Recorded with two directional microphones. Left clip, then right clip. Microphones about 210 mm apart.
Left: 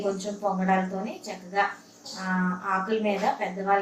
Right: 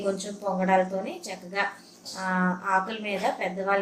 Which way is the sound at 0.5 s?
45° right (ahead or behind).